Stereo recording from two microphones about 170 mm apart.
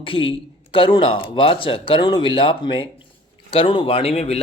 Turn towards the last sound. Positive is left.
turn(degrees=35)  # may be behind; listen again after turning